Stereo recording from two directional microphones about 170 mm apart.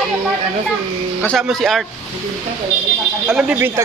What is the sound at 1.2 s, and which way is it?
Speech, 5° left (ahead or behind).